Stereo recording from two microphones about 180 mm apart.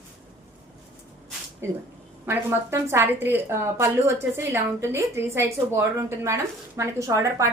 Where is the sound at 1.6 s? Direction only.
15° right (ahead or behind).